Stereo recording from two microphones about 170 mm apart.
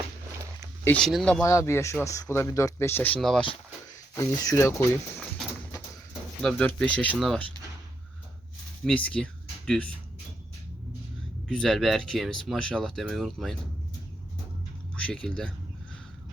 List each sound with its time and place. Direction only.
0.9 s speech: 5° left (ahead or behind)
1.4 s speech: 15° left (ahead or behind)
4.1 s speech: 20° left (ahead or behind)
6.4 s speech: 5° left (ahead or behind)
9.0 s speech: 5° left (ahead or behind)
11.4 s speech: centre (ahead or behind)
14.9 s speech: 5° left (ahead or behind)